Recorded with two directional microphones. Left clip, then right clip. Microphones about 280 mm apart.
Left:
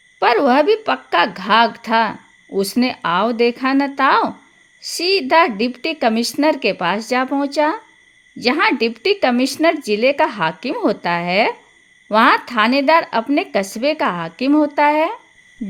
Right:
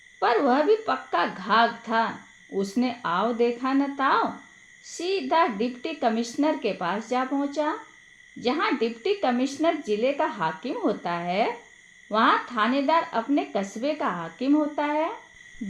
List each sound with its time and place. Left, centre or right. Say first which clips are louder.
0.2 s a woman's voice: left 8 dB; left